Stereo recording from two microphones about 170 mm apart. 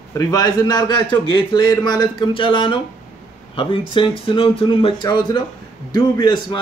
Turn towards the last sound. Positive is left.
turn(degrees=25)  # may be behind; listen again after turning